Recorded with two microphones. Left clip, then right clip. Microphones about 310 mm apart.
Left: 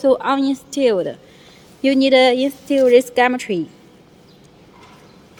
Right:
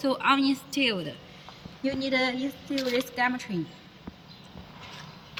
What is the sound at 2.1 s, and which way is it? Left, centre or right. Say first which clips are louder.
Speech: left 14 dB; centre.